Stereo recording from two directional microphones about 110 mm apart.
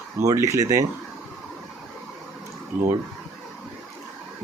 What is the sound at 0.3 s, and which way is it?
Speech, 25° right (ahead or behind).